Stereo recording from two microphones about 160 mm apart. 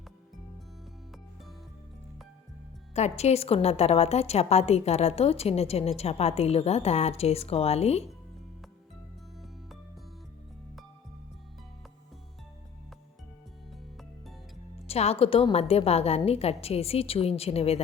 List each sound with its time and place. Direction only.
2.9 s a woman's voice: 45° left (ahead or behind)
14.8 s a woman's voice: 40° left (ahead or behind)